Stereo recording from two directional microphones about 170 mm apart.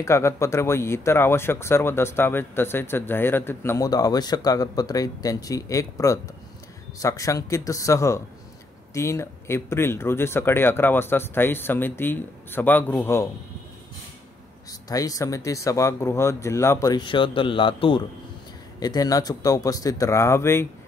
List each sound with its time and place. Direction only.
0.0 s speech: 15° left (ahead or behind)
14.7 s speech: 20° left (ahead or behind)